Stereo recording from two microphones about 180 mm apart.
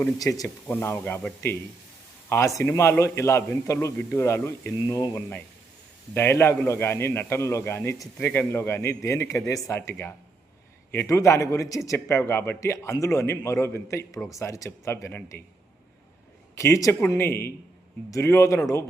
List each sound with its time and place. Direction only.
0.2 s a man's voice: 20° left (ahead or behind)
16.6 s a man's voice: 15° left (ahead or behind)